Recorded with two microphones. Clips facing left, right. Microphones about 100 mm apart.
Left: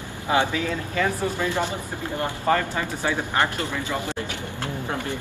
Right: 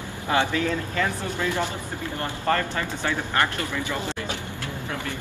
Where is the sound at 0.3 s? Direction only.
15° left (ahead or behind).